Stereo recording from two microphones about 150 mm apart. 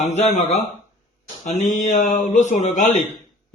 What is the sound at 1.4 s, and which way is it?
A man's voice, 55° left (ahead or behind).